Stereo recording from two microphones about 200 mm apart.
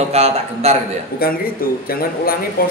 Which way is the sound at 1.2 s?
45° left (ahead or behind).